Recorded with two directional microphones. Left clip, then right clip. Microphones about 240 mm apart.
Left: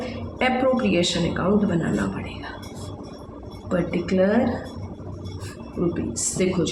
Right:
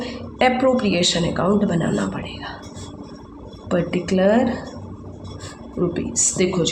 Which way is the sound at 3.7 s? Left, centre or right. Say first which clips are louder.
Right 2 dB; right.